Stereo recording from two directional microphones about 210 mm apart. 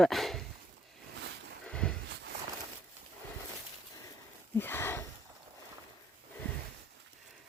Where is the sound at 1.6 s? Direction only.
5° left (ahead or behind).